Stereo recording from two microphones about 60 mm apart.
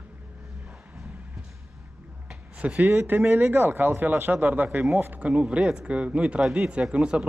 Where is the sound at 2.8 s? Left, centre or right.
Right.